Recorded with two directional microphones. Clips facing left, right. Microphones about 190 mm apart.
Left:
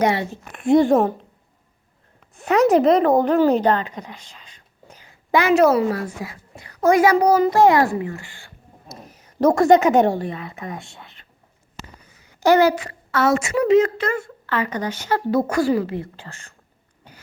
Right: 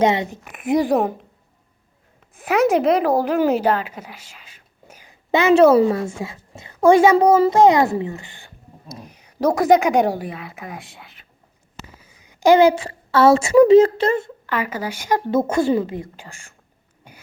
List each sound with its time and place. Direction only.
0.0 s a woman's voice: 20° right (ahead or behind)
0.5 s speech: centre (ahead or behind)
2.3 s a woman's voice: 5° right (ahead or behind)
5.3 s a woman's voice: 25° right (ahead or behind)
8.9 s speech: centre (ahead or behind)
12.2 s a woman's voice: 15° right (ahead or behind)
14.4 s speech: 10° right (ahead or behind)
15.3 s a woman's voice: 20° right (ahead or behind)
17.1 s throat clearing: 10° right (ahead or behind)